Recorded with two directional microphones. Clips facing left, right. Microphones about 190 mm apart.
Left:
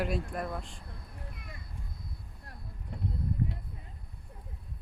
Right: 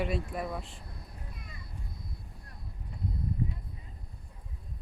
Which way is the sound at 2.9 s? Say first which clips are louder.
Left 2 dB; 60° left (ahead or behind).